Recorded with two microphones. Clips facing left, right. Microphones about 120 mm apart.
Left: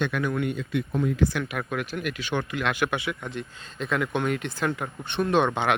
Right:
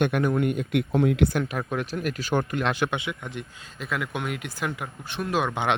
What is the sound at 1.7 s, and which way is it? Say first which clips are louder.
Speech: right 2 dB; 35° right (ahead or behind).